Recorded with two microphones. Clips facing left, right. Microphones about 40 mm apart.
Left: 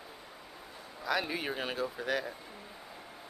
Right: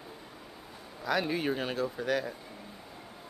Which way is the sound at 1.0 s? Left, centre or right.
Centre.